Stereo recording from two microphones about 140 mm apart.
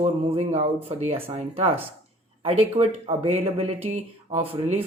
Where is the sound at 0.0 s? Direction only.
45° right (ahead or behind).